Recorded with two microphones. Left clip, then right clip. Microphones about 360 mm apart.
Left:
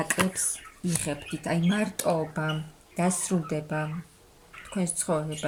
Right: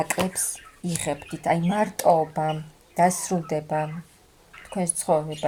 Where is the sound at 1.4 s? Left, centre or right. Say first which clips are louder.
Right 7 dB; centre.